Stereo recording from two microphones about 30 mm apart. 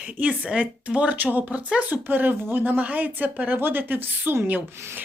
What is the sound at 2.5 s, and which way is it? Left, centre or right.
Speech, right.